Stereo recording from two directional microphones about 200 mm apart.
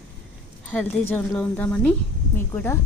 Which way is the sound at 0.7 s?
10° left (ahead or behind).